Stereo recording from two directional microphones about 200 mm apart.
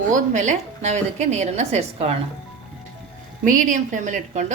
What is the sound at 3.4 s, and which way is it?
A woman's voice, 40° right (ahead or behind).